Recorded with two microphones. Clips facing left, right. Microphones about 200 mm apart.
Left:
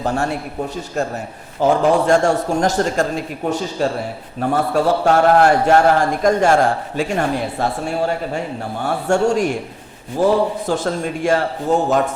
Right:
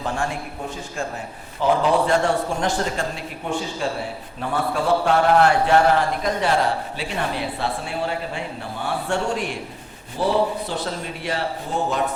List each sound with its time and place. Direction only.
0.0 s a man's voice: 40° left (ahead or behind)
1.6 s a man's voice: 45° left (ahead or behind)